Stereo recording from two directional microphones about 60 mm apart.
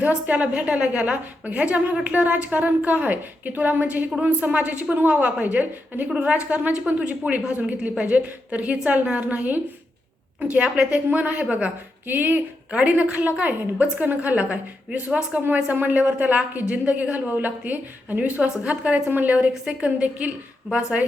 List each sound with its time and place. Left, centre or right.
0.0 s a woman's voice: centre
15.7 s a woman's voice: right